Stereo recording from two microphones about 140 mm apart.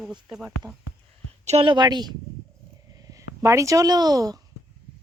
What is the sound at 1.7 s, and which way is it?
Speech, 30° right (ahead or behind).